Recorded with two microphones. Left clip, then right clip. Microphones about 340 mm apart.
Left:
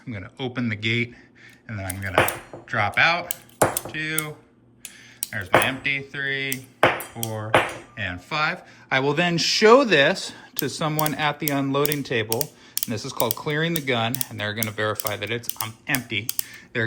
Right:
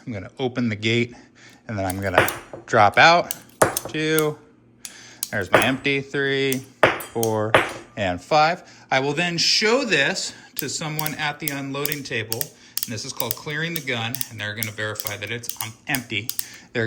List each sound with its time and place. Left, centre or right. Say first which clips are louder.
0.1 s speech: right 4 dB; centre
7.1 s speech: right 11 dB; right
7.9 s speech: right 9 dB; centre
12.9 s cutlery: left 6 dB; centre
15.5 s speech: even; centre